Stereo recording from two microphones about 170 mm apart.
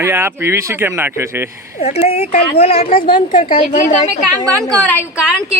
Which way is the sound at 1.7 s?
35° left (ahead or behind).